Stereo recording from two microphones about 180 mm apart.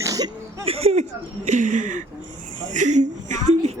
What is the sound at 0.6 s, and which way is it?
A woman's voice, 35° right (ahead or behind).